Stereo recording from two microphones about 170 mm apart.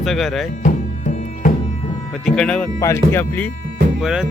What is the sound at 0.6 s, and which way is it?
Music, 50° left (ahead or behind).